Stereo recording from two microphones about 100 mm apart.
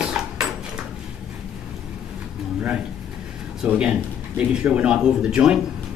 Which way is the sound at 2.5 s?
10° right (ahead or behind).